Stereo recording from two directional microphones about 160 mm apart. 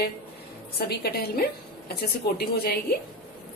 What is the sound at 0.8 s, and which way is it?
A woman's voice, 85° left.